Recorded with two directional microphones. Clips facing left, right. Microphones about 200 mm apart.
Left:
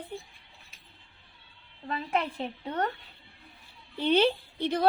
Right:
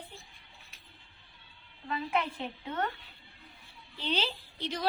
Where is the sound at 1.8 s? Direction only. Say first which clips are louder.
Left 2 dB; 35° left (ahead or behind).